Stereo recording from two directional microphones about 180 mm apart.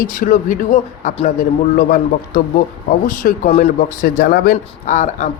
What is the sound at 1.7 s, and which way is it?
Speech, 55° left (ahead or behind).